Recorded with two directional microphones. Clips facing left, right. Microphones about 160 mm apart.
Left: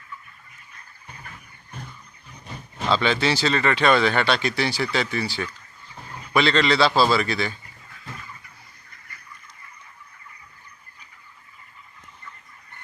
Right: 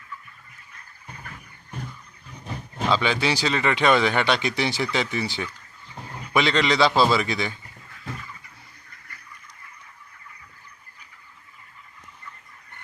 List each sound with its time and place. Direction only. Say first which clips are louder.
2.9 s speech: left 2 dB; 10° right (ahead or behind)